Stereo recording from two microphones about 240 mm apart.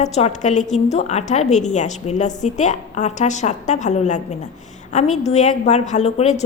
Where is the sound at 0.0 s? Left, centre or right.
Left.